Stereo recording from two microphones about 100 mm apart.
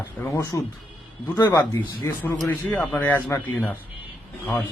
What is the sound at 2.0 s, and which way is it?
Speech, 20° left (ahead or behind).